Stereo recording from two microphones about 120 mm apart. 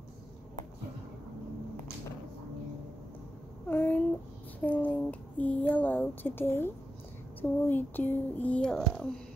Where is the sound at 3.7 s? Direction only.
15° left (ahead or behind).